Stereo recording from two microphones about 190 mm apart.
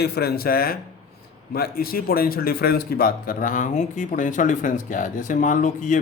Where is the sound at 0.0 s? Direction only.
55° left (ahead or behind).